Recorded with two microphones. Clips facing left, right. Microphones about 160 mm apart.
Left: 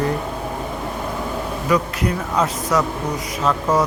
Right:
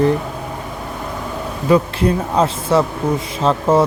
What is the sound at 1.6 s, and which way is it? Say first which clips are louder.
Speech: right 6 dB; 30° right (ahead or behind).